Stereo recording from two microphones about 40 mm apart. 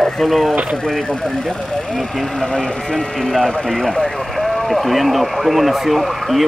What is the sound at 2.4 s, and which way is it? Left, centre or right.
Speech, centre.